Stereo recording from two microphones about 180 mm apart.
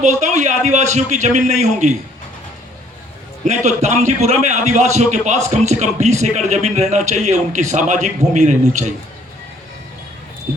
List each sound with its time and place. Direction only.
0.0 s a man's voice: 40° right (ahead or behind)
3.4 s a man's voice: 40° right (ahead or behind)